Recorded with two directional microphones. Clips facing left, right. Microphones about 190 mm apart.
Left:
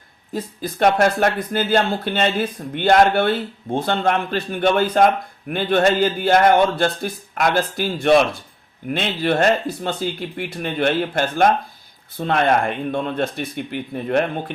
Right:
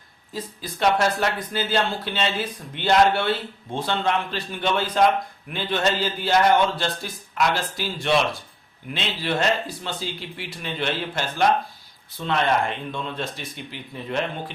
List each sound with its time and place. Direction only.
0.3 s speech: 55° left (ahead or behind)